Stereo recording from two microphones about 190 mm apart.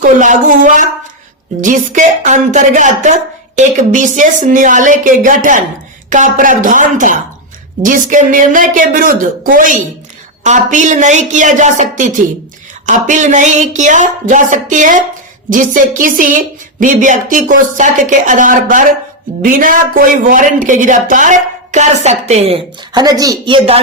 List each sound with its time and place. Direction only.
0.0 s speech: 45° right (ahead or behind); by 23.6 s 20° right (ahead or behind)